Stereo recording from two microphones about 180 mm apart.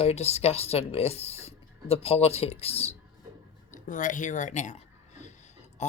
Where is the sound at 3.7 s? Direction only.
45° left (ahead or behind).